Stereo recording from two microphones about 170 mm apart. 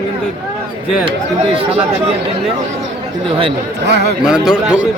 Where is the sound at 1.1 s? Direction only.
30° right (ahead or behind).